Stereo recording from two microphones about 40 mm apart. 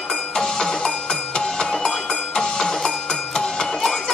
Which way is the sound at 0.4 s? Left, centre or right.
Centre.